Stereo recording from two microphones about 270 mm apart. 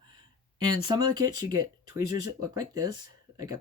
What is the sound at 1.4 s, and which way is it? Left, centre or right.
Speech, centre.